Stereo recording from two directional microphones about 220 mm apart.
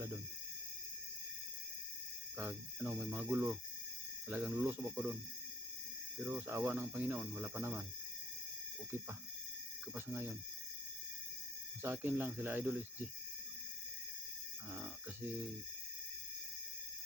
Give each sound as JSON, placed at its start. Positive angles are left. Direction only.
{"t": 2.4, "sound": "speech", "side_deg": -10}
{"t": 6.1, "sound": "speech", "side_deg": -10}
{"t": 9.9, "sound": "speech", "side_deg": -10}
{"t": 11.8, "sound": "speech", "side_deg": -10}